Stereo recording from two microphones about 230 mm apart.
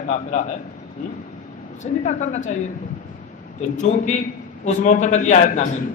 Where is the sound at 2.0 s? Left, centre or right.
Left.